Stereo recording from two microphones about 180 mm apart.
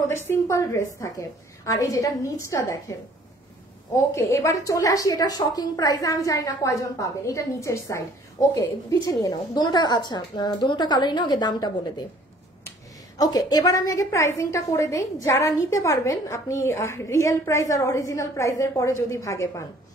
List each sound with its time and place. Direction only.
0.1 s a woman's voice: 15° left (ahead or behind)
13.2 s a woman's voice: 20° left (ahead or behind)